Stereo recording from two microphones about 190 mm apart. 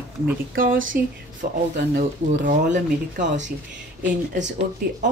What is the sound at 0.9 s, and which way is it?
A woman's voice, 50° right (ahead or behind).